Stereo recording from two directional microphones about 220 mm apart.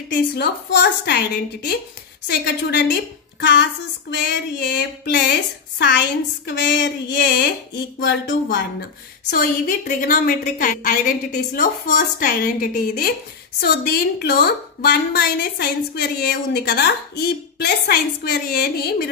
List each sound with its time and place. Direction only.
0.1 s a woman's voice: 50° left (ahead or behind)
9.3 s a woman's voice: 40° left (ahead or behind)